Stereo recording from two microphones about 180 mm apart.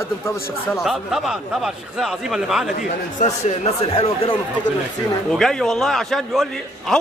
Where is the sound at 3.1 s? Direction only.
40° left (ahead or behind).